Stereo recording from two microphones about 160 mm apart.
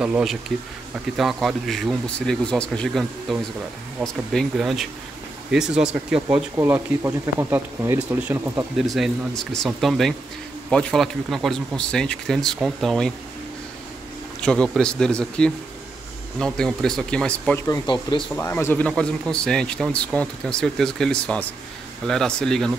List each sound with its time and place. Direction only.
0.0 s speech: 5° right (ahead or behind)
8.8 s speech: centre (ahead or behind)
14.4 s speech: 5° left (ahead or behind)
17.6 s speech: 25° left (ahead or behind)
18.3 s speech: 15° left (ahead or behind)